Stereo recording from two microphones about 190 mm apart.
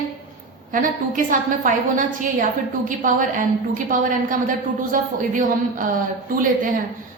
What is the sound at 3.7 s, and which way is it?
A woman's voice, 45° right (ahead or behind).